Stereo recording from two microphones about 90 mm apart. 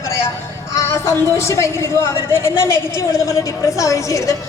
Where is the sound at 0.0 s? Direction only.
30° left (ahead or behind).